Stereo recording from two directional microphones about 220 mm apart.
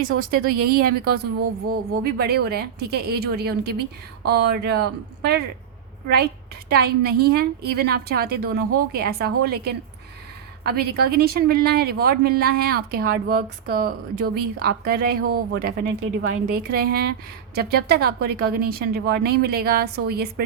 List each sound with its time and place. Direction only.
0.2 s speech: 40° right (ahead or behind)
6.7 s speech: 45° right (ahead or behind)